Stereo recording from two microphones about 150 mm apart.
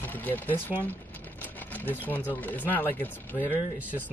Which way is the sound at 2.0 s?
10° left (ahead or behind).